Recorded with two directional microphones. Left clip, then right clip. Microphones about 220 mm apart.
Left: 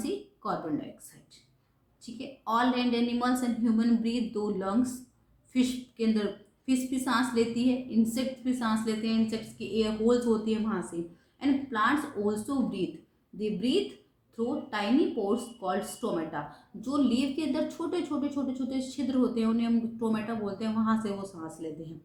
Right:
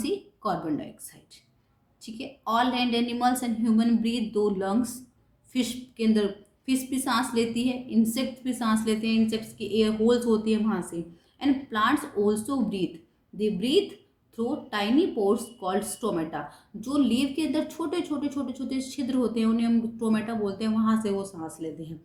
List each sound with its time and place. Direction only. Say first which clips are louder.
2.1 s speech: right 3 dB; 45° right (ahead or behind)